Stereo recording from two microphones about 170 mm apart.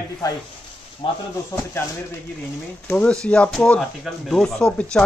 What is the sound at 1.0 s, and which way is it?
Speech, 30° left (ahead or behind).